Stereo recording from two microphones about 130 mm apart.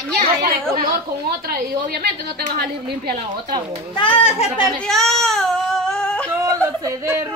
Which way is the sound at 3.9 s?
40° left (ahead or behind).